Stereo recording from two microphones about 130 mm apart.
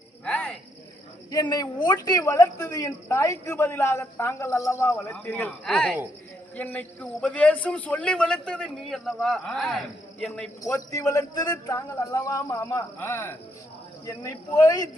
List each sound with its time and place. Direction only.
0.3 s cricket: 15° left (ahead or behind)
1.3 s a woman's voice: 30° left (ahead or behind); by 10.5 s 5° left (ahead or behind)
10.6 s a woman's voice: 25° left (ahead or behind)